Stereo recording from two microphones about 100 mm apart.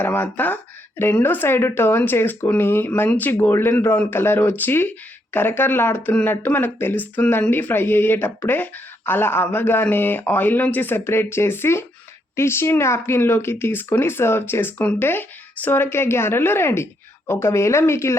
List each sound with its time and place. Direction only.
0.0 s speech: 20° left (ahead or behind)
14.8 s speech: 10° left (ahead or behind); by 18.2 s 25° left (ahead or behind)